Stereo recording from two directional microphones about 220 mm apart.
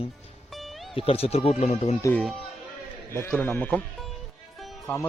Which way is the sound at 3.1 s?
10° left (ahead or behind).